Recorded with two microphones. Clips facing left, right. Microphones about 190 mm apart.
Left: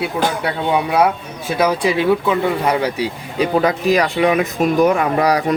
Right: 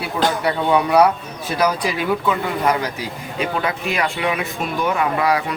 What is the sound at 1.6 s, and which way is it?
Speech, 25° left (ahead or behind).